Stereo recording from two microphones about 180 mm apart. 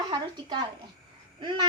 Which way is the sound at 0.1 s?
25° right (ahead or behind).